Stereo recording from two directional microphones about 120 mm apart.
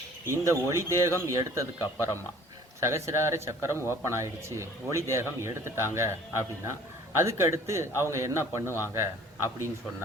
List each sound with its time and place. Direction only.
0.3 s speech: 25° right (ahead or behind)
7.3 s speech: 25° right (ahead or behind)
8.6 s a man's voice: 20° left (ahead or behind)
9.0 s a man's voice: 20° right (ahead or behind)